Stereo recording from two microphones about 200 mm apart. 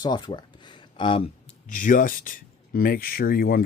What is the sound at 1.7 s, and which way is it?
Speech, 40° left (ahead or behind).